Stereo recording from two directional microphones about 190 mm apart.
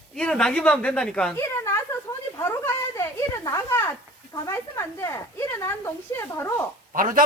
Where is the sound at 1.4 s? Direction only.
15° left (ahead or behind).